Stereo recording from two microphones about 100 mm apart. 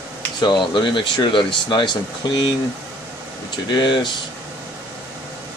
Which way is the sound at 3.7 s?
50° left (ahead or behind).